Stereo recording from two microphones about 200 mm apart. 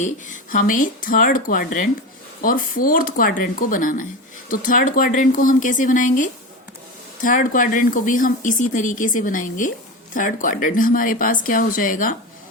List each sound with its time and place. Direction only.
0.0 s speech: 40° left (ahead or behind)